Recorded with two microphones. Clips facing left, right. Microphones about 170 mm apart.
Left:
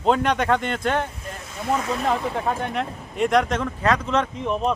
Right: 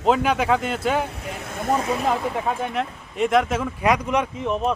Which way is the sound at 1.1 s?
70° right (ahead or behind).